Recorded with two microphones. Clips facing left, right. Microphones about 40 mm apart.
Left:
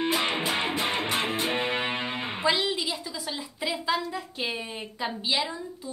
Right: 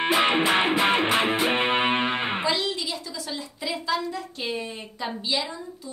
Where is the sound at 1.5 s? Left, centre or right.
Right.